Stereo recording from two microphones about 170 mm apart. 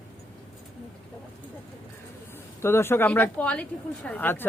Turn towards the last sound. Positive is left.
turn(degrees=10)  # may be behind; listen again after turning